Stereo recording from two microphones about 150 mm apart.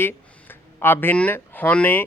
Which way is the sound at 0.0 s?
15° left (ahead or behind).